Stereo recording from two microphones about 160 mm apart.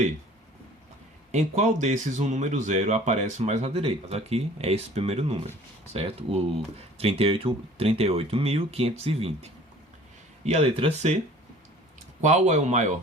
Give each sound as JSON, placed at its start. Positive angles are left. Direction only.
{"t": 1.3, "sound": "speech", "side_deg": -45}
{"t": 12.2, "sound": "speech", "side_deg": -45}